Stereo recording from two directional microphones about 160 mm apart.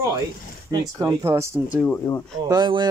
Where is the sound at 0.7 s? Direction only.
25° right (ahead or behind).